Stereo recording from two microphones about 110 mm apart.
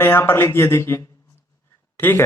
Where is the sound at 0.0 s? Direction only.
20° left (ahead or behind).